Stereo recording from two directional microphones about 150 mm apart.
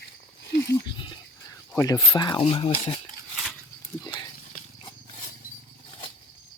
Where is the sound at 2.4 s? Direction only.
40° left (ahead or behind).